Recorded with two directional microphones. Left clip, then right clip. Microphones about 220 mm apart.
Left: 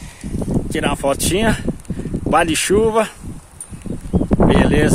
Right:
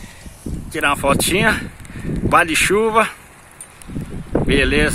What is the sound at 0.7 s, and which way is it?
Speech, 10° left (ahead or behind).